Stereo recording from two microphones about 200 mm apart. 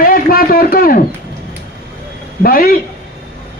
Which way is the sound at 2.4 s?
45° left (ahead or behind).